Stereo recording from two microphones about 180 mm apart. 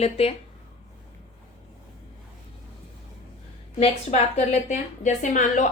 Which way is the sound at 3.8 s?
35° left (ahead or behind).